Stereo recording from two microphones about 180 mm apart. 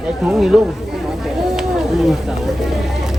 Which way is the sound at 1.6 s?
Centre (ahead or behind).